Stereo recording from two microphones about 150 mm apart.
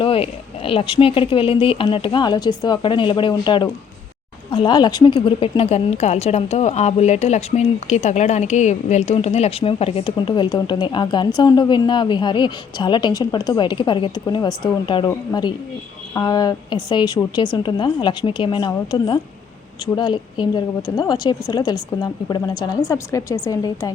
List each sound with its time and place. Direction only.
0.0 s a woman's voice: 40° left (ahead or behind)